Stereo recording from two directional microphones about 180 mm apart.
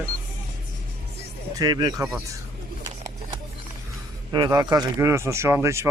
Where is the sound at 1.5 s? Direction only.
20° right (ahead or behind).